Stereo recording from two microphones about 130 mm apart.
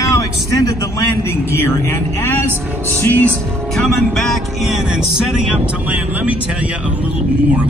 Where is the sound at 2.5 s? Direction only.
20° right (ahead or behind).